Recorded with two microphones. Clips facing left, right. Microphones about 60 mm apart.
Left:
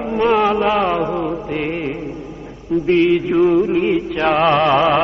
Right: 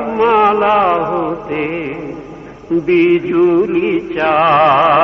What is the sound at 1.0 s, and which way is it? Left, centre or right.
Music, right.